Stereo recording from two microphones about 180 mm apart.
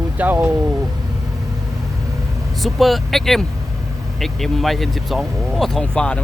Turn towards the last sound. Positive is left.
turn(degrees=5)  # may be behind; listen again after turning